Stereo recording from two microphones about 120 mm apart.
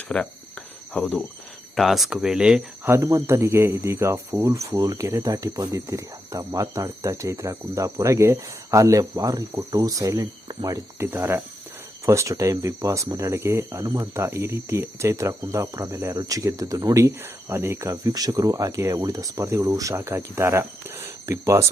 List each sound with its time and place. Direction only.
0.1 s cricket: 10° left (ahead or behind)
1.7 s speech: centre (ahead or behind)
2.8 s speech: 25° right (ahead or behind)